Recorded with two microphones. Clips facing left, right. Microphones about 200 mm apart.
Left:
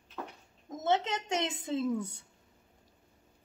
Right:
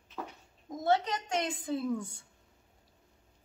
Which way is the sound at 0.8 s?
20° left (ahead or behind).